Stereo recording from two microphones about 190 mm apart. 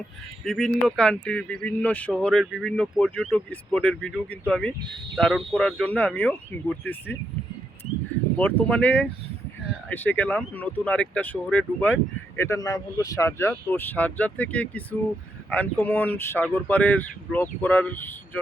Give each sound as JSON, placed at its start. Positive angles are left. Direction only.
{"t": 0.4, "sound": "speech", "side_deg": 0}
{"t": 8.4, "sound": "speech", "side_deg": 10}